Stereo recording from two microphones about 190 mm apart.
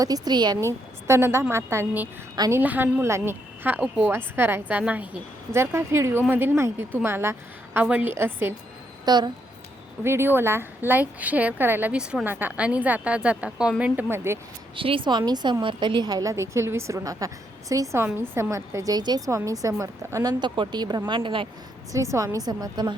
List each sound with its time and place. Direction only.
0.0 s a woman's voice: 20° right (ahead or behind)
2.6 s a woman's voice: 10° right (ahead or behind)
9.0 s a woman's voice: 25° right (ahead or behind)
10.0 s a woman's voice: 10° right (ahead or behind)
14.8 s a woman's voice: 25° right (ahead or behind)
21.9 s a woman's voice: 15° right (ahead or behind)